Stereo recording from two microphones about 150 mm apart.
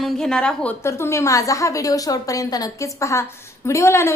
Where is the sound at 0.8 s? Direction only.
20° left (ahead or behind).